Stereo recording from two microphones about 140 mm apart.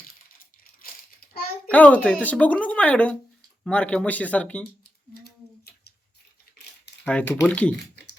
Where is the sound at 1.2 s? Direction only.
90° left.